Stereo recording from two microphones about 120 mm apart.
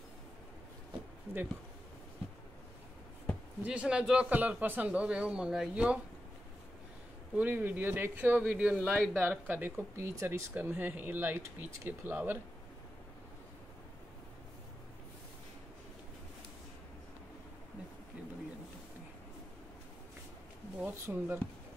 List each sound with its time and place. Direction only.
1.3 s speech: 20° right (ahead or behind)
3.6 s speech: 10° right (ahead or behind)
7.3 s speech: 15° right (ahead or behind)
20.8 s speech: 20° right (ahead or behind)